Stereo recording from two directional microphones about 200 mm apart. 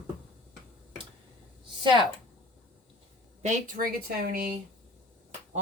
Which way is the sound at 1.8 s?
25° right (ahead or behind).